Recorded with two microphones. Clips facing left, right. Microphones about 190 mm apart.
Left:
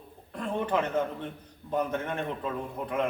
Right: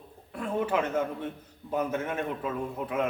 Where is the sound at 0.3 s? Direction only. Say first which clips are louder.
Right 1 dB; 5° right (ahead or behind).